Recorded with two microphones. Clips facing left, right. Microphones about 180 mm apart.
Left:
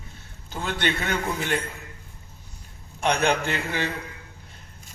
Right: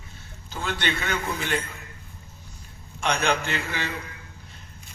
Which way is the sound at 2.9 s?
55° left (ahead or behind).